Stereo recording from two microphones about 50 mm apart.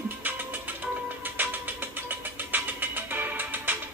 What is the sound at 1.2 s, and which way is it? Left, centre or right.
Vehicle, right.